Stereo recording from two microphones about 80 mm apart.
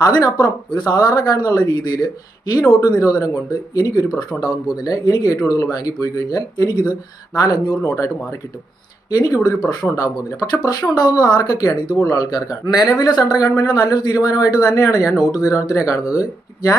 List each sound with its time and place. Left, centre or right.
0.0 s speech: left
7.8 s speech: left
12.0 s speech: left